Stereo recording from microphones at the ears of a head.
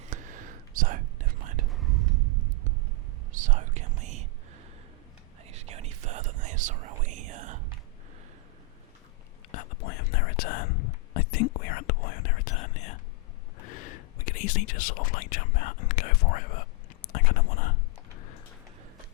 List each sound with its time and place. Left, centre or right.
0.0 s whispering: right
9.5 s whispering: left